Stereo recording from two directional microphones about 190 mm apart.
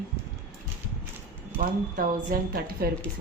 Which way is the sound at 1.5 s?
45° right (ahead or behind).